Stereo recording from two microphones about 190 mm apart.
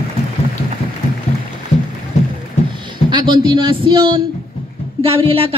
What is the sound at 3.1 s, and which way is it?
A man's voice, 20° right (ahead or behind).